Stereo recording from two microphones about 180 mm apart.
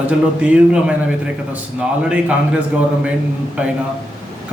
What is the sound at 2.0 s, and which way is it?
Speech, 5° right (ahead or behind).